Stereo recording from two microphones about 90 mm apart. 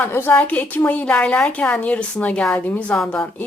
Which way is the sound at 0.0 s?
25° left (ahead or behind).